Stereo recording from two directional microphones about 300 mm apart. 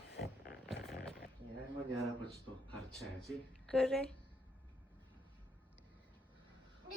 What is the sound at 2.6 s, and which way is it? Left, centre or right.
Speech, centre.